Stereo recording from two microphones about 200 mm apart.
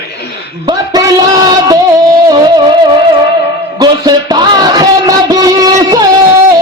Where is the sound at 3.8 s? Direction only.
20° right (ahead or behind).